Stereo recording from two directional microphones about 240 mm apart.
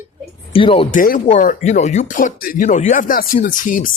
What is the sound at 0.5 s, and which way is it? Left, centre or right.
Speech, left.